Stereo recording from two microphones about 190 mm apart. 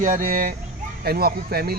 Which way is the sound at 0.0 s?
45° right (ahead or behind).